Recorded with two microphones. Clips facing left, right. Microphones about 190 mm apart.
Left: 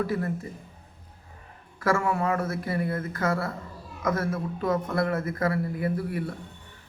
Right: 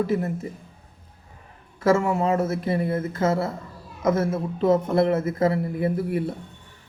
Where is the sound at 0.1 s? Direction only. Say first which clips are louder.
Right 5 dB; 20° right (ahead or behind).